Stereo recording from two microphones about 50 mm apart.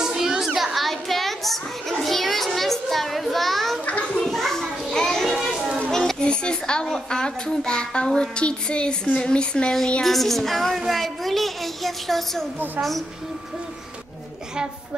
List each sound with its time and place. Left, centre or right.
0.0 s children playing: centre
5.9 s a sound: centre
6.2 s a child's voice: centre
10.0 s a woman's voice: centre